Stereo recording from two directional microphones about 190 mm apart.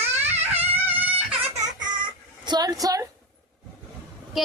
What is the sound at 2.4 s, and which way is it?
Speech, 20° right (ahead or behind).